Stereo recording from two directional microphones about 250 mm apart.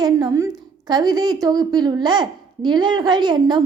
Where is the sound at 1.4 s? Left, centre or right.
Centre.